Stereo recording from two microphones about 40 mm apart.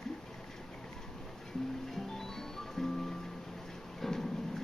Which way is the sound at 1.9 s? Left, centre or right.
Centre.